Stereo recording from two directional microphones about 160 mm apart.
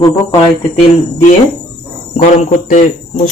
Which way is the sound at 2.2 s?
50° left (ahead or behind).